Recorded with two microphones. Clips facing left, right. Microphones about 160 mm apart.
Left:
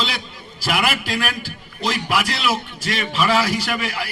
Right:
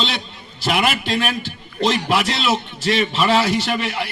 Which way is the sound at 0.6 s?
25° right (ahead or behind).